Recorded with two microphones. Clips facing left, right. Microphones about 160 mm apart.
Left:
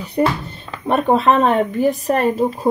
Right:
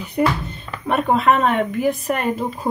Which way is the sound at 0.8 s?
30° left (ahead or behind).